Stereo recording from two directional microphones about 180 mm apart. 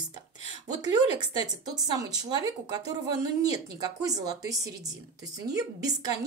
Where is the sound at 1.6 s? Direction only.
20° right (ahead or behind).